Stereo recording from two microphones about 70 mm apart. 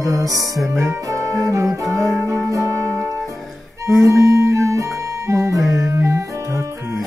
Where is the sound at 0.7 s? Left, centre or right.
Right.